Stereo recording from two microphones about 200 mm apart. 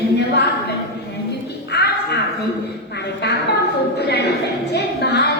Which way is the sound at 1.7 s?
55° left (ahead or behind).